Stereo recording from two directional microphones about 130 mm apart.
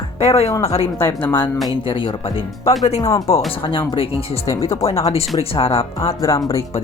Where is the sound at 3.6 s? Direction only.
40° left (ahead or behind).